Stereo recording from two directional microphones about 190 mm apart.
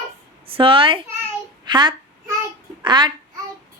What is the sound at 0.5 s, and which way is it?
A woman's voice, 25° right (ahead or behind).